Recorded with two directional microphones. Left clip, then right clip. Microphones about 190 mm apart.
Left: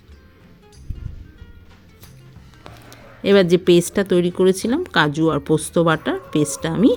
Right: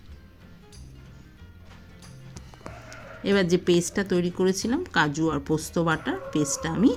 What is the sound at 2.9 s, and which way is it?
A woman's voice, 25° left (ahead or behind).